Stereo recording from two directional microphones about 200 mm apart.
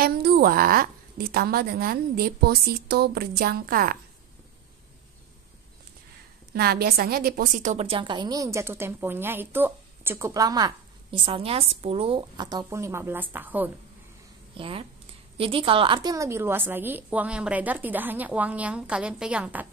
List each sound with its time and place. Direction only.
0.0 s a woman's voice: 50° right (ahead or behind)
6.5 s a woman's voice: 50° right (ahead or behind); by 13.7 s 10° right (ahead or behind)
14.5 s a woman's voice: 25° right (ahead or behind); by 19.7 s 5° right (ahead or behind)